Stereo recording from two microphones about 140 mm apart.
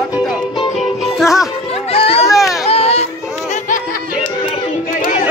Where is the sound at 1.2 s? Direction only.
5° right (ahead or behind).